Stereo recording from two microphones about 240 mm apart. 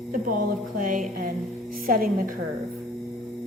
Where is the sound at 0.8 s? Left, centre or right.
Right.